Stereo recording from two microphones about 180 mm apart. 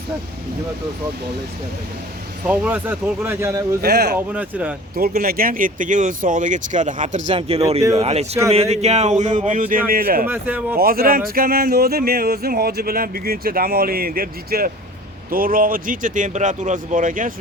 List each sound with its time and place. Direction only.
2.5 s speech: 10° right (ahead or behind)
3.8 s speech: 65° right (ahead or behind)
4.3 s speech: 10° right (ahead or behind)
5.2 s speech: 55° right (ahead or behind)
10.2 s speech: 10° right (ahead or behind)
10.8 s speech: 55° right (ahead or behind)